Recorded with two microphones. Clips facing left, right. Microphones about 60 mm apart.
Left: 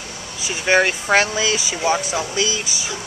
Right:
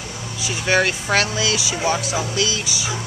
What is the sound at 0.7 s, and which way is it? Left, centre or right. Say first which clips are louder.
Speech: left 2 dB; centre.